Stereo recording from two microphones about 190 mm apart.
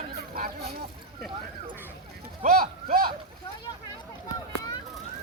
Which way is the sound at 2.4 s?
50° right (ahead or behind).